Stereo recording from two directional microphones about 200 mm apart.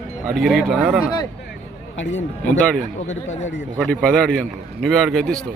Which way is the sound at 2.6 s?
5° left (ahead or behind).